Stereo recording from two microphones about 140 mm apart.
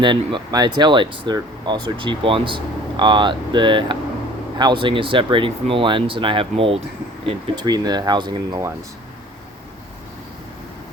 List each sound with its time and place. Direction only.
0.0 s speech: 35° right (ahead or behind)
7.5 s speech: 30° right (ahead or behind)